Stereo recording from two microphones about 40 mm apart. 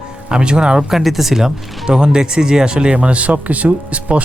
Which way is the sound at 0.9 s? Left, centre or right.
Centre.